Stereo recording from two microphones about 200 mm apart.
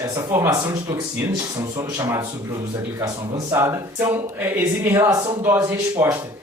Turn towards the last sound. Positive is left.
turn(degrees=-10)  # may be behind; listen again after turning